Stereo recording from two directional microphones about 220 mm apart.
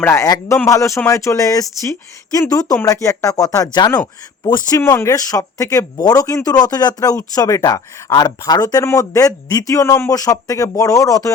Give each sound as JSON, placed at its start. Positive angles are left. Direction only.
{"t": 0.0, "sound": "speech", "side_deg": 10}